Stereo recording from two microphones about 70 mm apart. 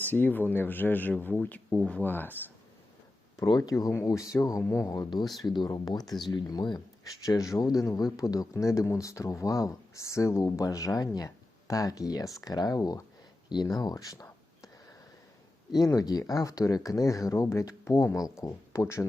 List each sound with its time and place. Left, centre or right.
0.0 s speech: left
3.3 s speech: left
4.6 s speech: left
4.9 s speech: left
5.4 s speech: left
5.7 s speech: left
6.3 s speech: left
13.5 s speech: left
15.8 s speech: left
18.1 s speech: left